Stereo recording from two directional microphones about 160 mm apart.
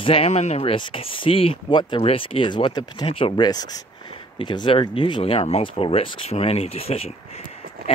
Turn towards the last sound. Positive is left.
turn(degrees=40)  # may be behind; listen again after turning